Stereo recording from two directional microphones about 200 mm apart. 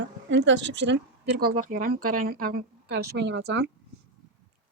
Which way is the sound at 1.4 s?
40° right (ahead or behind).